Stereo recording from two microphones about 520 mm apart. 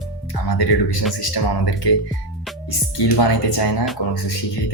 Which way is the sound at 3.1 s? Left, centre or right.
Left.